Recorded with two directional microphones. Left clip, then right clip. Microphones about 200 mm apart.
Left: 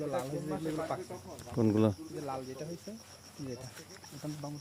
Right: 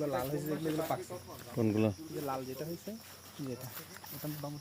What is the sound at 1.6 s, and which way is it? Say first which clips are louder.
Speech: left 3 dB; 25° left (ahead or behind).